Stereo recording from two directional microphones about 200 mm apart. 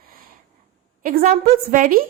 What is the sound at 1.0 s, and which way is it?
Speech, 45° right (ahead or behind).